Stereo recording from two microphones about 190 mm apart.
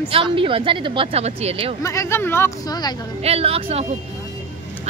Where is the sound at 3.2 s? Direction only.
30° right (ahead or behind).